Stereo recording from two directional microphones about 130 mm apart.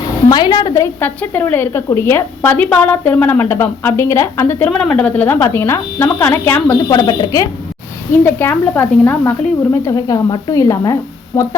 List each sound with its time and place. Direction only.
0.3 s a woman's voice: 35° left (ahead or behind)
4.7 s a woman's voice: 5° left (ahead or behind)
6.8 s speech: 35° left (ahead or behind)
8.1 s a woman's voice: 15° left (ahead or behind)
9.9 s a woman's voice: 30° left (ahead or behind); by 11.5 s 15° left (ahead or behind)